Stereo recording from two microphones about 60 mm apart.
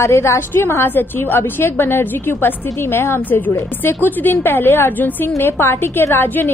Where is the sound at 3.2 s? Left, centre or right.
Left.